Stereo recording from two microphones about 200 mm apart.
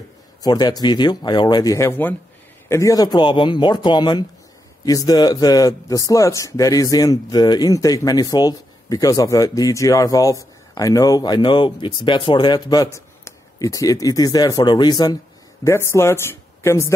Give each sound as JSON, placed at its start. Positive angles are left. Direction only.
{"t": 0.4, "sound": "a man's voice", "side_deg": 20}